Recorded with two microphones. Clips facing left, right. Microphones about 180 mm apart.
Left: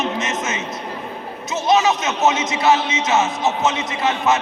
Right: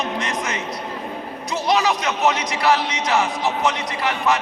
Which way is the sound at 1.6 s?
20° left (ahead or behind).